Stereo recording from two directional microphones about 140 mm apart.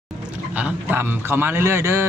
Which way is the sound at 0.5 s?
10° right (ahead or behind).